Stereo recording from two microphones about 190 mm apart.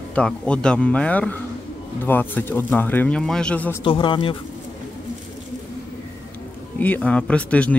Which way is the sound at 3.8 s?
25° left (ahead or behind).